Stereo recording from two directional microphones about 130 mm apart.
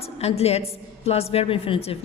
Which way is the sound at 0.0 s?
55° left (ahead or behind).